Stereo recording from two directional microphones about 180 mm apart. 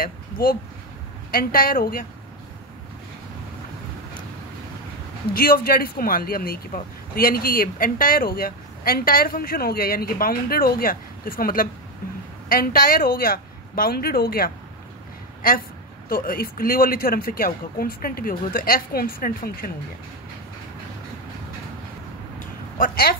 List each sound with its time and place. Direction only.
0.0 s speech: 55° left (ahead or behind)
5.3 s speech: 55° left (ahead or behind)
22.4 s a sound: 50° left (ahead or behind)